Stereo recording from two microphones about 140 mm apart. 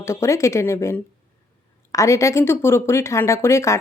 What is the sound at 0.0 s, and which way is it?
Speech, 20° left (ahead or behind).